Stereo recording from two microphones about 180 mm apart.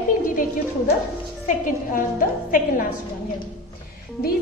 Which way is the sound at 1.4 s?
45° left (ahead or behind).